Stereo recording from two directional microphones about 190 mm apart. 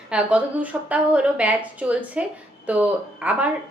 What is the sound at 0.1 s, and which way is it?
A woman's voice, 5° right (ahead or behind).